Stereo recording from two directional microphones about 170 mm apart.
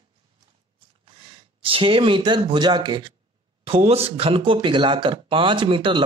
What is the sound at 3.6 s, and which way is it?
Speech, 35° right (ahead or behind).